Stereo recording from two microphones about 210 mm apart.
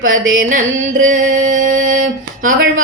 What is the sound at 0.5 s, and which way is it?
Music, 35° right (ahead or behind).